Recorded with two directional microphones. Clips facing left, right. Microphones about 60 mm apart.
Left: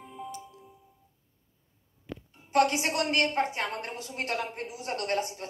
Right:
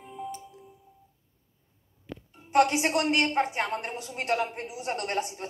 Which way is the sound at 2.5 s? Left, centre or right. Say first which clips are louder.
Right 2 dB; right.